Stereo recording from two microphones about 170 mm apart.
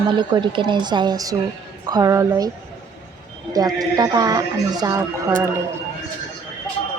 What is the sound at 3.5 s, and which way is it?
Speech, 20° right (ahead or behind).